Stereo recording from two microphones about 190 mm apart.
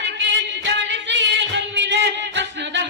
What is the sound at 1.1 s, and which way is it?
Music, 65° right (ahead or behind).